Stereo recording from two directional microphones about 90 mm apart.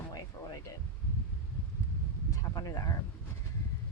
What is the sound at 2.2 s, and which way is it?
Speech, 40° left (ahead or behind).